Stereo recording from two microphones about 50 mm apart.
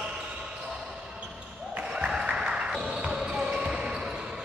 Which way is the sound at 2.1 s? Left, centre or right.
Centre.